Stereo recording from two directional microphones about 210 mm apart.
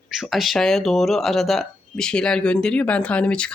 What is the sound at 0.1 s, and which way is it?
A child's voice, centre (ahead or behind).